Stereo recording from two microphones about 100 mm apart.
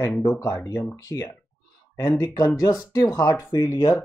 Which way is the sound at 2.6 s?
35° left (ahead or behind).